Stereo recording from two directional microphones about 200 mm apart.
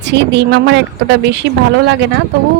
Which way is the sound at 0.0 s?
60° right (ahead or behind).